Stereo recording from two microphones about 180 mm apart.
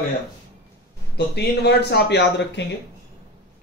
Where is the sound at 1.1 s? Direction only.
65° left (ahead or behind).